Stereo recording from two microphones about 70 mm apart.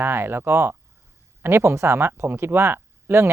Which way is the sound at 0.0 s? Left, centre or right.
Right.